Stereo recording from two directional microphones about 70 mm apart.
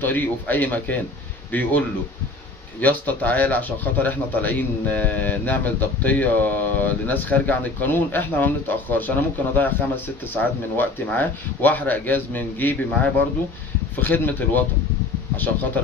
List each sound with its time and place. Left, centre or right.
0.0 s speech: left